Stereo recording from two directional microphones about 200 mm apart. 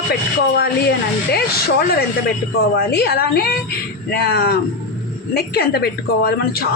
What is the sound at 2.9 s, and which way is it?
A woman's voice, 50° left (ahead or behind).